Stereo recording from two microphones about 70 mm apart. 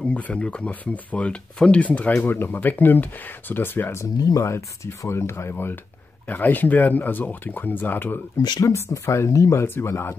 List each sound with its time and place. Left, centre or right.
0.0 s speech: centre
4.2 s speech: left
4.5 s speech: left
8.4 s speech: left
8.6 s speech: left